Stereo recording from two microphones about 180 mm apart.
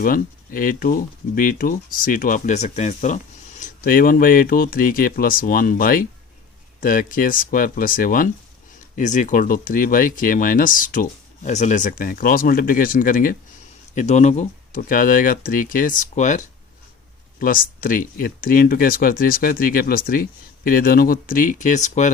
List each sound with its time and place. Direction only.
0.0 s speech: 50° left (ahead or behind)
3.6 s speech: 50° left (ahead or behind)